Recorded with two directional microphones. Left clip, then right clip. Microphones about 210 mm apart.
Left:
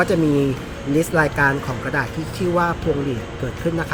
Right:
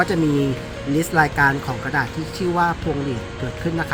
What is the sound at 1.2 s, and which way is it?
Speech, 25° right (ahead or behind).